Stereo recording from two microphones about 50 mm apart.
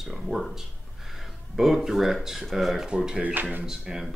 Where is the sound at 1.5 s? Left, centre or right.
Centre.